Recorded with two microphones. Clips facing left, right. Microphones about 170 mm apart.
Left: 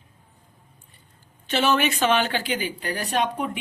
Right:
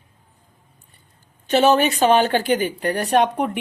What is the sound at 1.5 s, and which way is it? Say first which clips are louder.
Speech: right 6 dB; 40° right (ahead or behind).